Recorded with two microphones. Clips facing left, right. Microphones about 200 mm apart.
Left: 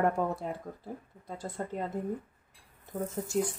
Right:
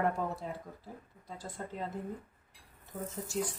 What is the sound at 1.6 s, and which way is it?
Speech, 50° left (ahead or behind).